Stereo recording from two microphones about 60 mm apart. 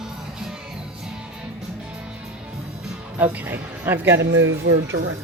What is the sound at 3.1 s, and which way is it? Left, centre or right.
Speech, right.